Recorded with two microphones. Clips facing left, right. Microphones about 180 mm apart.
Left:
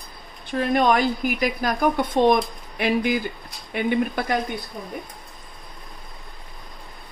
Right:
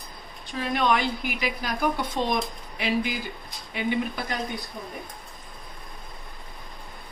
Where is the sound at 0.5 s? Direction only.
50° left (ahead or behind).